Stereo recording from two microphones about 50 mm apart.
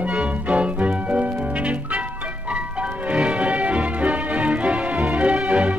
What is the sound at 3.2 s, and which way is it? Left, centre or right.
Music, right.